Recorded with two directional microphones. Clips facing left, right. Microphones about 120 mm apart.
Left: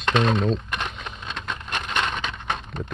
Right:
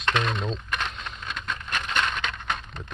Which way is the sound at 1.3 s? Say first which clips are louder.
Left 1 dB; 30° left (ahead or behind).